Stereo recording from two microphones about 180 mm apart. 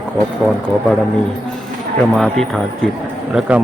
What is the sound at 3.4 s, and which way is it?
Speech, 5° right (ahead or behind).